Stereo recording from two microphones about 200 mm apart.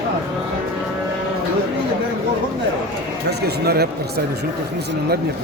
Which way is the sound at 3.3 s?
55° right (ahead or behind).